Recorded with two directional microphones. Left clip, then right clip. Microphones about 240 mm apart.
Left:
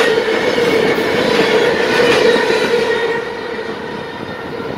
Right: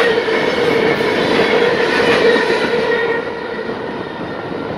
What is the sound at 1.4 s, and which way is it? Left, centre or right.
Train, left.